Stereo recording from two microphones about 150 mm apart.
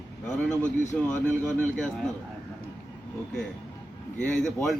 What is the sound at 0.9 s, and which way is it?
Speech, 10° left (ahead or behind).